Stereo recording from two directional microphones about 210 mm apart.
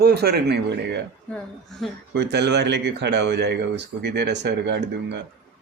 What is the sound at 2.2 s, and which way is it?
A man's voice, 55° right (ahead or behind).